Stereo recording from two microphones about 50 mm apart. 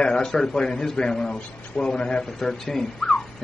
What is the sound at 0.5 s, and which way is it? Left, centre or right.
A man's voice, centre.